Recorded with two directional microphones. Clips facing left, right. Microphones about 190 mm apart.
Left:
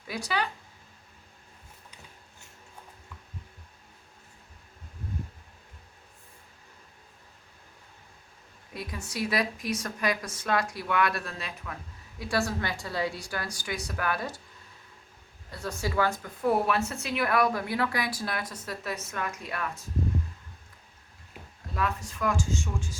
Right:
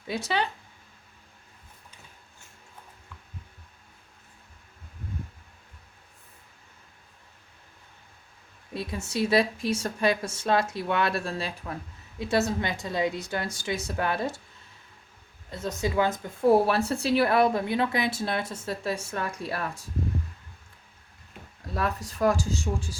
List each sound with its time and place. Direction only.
0.1 s a woman's voice: 25° right (ahead or behind)
8.7 s a woman's voice: 25° right (ahead or behind)
12.2 s a woman's voice: 20° right (ahead or behind)
15.4 s a woman's voice: 20° right (ahead or behind)
21.8 s speech: 35° right (ahead or behind)